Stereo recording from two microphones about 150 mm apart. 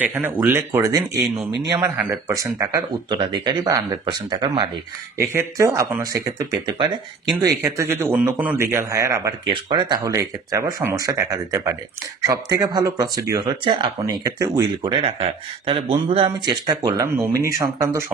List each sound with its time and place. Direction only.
0.0 s a man's voice: 10° right (ahead or behind)
3.1 s speech: 30° right (ahead or behind)
5.3 s a man's voice: 20° right (ahead or behind)
13.7 s speech: 35° right (ahead or behind)
14.0 s speech: 25° right (ahead or behind)